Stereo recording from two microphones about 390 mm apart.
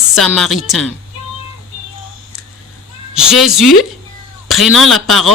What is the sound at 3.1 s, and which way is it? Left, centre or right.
A woman's voice, centre.